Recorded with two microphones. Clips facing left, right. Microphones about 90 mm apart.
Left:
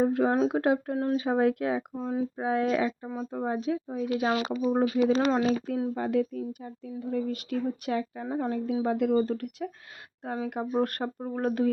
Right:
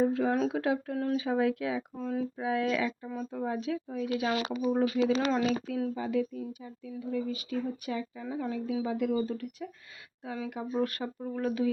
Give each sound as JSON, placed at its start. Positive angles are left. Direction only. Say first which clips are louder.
{"t": 0.0, "sound": "speech", "louder": "left 3 dB", "side_deg": 45}
{"t": 2.0, "sound": "speech", "louder": "left 3 dB", "side_deg": 25}
{"t": 2.4, "sound": "speech", "louder": "left 4 dB", "side_deg": 40}
{"t": 5.9, "sound": "speech", "louder": "left 3 dB", "side_deg": 55}
{"t": 10.2, "sound": "speech", "louder": "left 4 dB", "side_deg": 45}